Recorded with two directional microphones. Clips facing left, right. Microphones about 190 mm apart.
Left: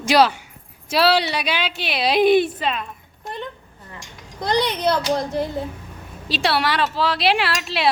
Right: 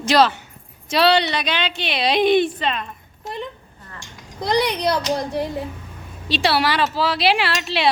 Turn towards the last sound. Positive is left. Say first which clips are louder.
# right 1 dB
turn(degrees=0)  # may be behind; listen again after turning